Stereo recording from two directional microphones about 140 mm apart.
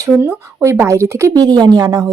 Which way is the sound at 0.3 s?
20° right (ahead or behind).